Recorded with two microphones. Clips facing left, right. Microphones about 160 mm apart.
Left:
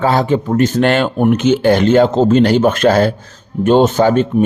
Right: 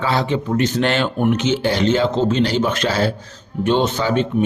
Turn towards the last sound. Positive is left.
turn(degrees=45)  # may be behind; listen again after turning